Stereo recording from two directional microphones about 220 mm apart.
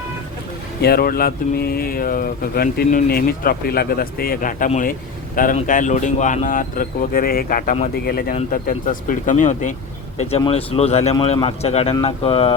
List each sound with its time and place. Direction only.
0.8 s speech: 45° left (ahead or behind); by 12.5 s 25° left (ahead or behind)